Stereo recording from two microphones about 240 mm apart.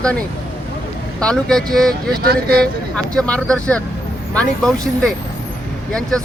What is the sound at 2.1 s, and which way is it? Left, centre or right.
Speech, right.